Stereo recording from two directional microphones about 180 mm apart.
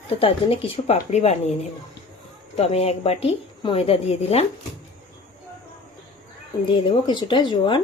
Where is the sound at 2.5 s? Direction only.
35° left (ahead or behind).